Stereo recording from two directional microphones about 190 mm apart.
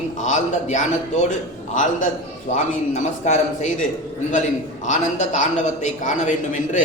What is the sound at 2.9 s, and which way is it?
Speech, 40° left (ahead or behind).